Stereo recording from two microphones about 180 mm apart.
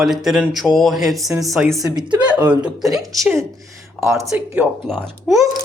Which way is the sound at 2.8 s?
20° right (ahead or behind).